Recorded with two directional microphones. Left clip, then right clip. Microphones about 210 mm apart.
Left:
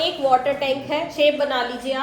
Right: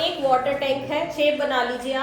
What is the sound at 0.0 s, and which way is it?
A woman's voice, 20° left (ahead or behind).